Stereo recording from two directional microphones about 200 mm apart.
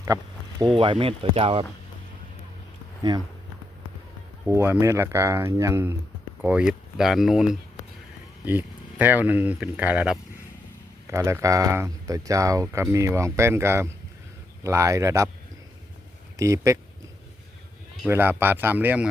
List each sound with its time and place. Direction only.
0.1 s speech: 20° right (ahead or behind)
3.0 s speech: 20° right (ahead or behind)
4.4 s speech: 10° right (ahead or behind)
16.4 s speech: 15° right (ahead or behind)
18.0 s speech: 10° right (ahead or behind)